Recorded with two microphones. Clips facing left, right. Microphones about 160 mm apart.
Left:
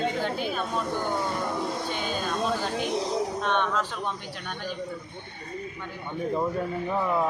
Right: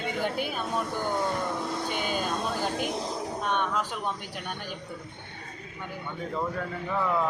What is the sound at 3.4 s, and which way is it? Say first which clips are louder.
Speech: left 2 dB; 10° right (ahead or behind).